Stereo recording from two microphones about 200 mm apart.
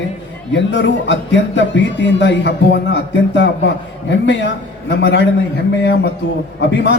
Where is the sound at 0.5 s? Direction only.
65° left (ahead or behind).